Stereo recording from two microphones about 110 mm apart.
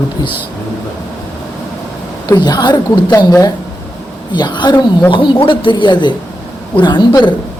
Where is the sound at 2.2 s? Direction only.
35° left (ahead or behind).